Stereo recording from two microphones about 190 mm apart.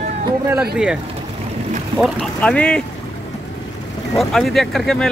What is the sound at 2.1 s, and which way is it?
Speech, 5° left (ahead or behind).